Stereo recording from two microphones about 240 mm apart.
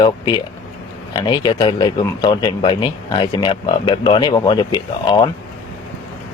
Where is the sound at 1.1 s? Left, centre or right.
Centre.